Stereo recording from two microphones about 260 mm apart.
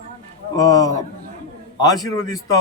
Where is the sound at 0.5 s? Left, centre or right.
Centre.